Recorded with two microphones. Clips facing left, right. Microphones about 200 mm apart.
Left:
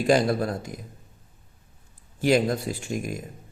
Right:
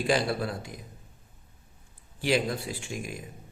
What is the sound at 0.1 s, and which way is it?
Speech, 40° left (ahead or behind).